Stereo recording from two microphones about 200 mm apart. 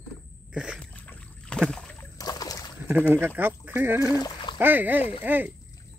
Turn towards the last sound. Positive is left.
turn(degrees=-10)  # may be behind; listen again after turning